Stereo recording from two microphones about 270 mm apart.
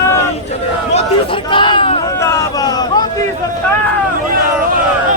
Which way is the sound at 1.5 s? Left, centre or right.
Centre.